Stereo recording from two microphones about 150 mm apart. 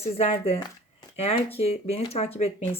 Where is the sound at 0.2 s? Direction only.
45° left (ahead or behind).